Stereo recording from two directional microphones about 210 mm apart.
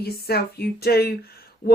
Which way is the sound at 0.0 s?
50° left (ahead or behind).